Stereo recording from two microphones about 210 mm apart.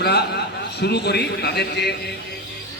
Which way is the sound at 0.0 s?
50° left (ahead or behind).